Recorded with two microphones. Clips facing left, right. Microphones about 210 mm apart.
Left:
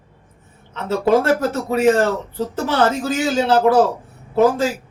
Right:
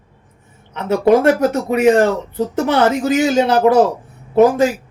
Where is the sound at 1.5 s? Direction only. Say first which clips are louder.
Right 3 dB; 15° right (ahead or behind).